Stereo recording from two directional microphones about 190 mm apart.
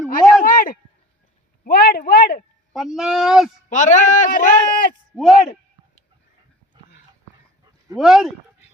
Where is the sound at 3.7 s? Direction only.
40° left (ahead or behind).